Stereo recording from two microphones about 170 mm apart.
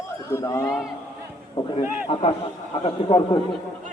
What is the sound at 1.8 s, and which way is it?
Speech, 35° left (ahead or behind).